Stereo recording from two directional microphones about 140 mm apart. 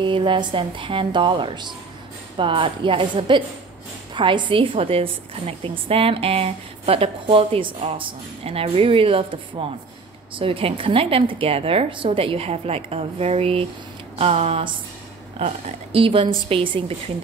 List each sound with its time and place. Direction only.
0.0 s a woman's voice: 35° right (ahead or behind)